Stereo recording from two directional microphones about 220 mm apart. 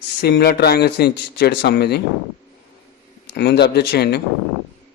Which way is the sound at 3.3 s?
50° left (ahead or behind).